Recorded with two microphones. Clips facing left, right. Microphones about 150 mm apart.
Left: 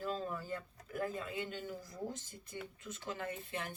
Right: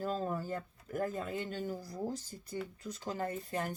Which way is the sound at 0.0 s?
40° right (ahead or behind).